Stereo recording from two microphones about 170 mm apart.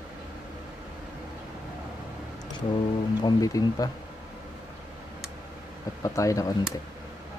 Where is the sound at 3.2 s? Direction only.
20° left (ahead or behind).